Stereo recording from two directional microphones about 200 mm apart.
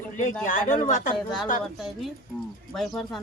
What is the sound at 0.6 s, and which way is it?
Speech, 40° left (ahead or behind).